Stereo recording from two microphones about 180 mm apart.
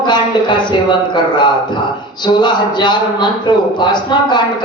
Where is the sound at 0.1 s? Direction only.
25° left (ahead or behind).